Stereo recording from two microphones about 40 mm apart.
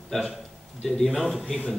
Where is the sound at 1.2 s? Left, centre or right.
Centre.